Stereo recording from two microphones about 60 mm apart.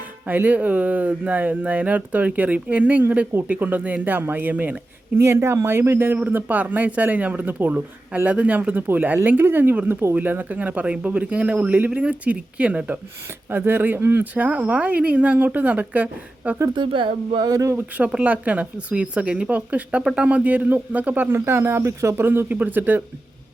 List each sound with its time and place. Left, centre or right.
0.3 s speech: right
4.5 s speech: right
5.1 s speech: right
6.3 s speech: right
13.5 s speech: right
17.4 s speech: right
17.7 s speech: right
22.3 s speech: right